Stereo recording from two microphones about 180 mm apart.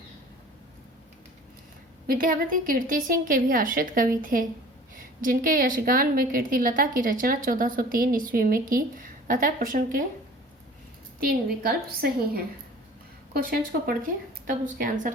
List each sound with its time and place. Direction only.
2.0 s a woman's voice: 50° right (ahead or behind)
11.6 s a woman's voice: 55° right (ahead or behind)